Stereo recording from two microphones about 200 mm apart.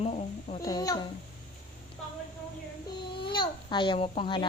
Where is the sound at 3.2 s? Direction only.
25° left (ahead or behind).